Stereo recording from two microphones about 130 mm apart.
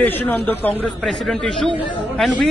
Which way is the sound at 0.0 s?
10° left (ahead or behind).